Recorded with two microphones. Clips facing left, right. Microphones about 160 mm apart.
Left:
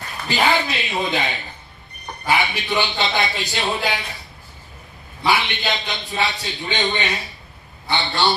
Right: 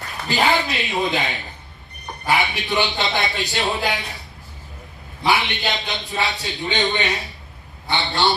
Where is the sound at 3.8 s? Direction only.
20° right (ahead or behind).